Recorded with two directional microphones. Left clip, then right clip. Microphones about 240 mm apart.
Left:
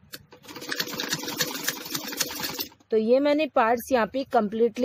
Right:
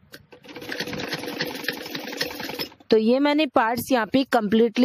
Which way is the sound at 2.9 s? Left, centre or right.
Right.